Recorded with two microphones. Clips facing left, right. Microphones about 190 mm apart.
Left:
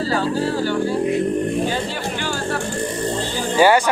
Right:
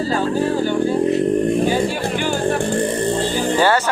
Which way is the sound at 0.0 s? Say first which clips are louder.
Right 2 dB; 15° right (ahead or behind).